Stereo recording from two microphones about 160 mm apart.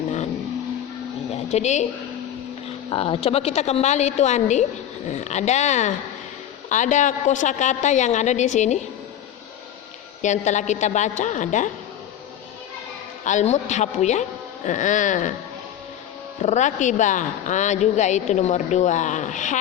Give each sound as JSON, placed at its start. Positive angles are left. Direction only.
{"t": 1.3, "sound": "speech", "side_deg": 45}
{"t": 2.9, "sound": "speech", "side_deg": 35}
{"t": 10.2, "sound": "speech", "side_deg": 50}
{"t": 13.2, "sound": "speech", "side_deg": 45}
{"t": 16.4, "sound": "speech", "side_deg": 45}